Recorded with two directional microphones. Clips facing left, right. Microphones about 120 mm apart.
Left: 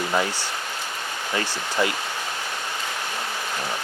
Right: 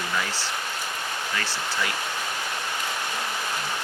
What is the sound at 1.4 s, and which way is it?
Speech, 15° left (ahead or behind).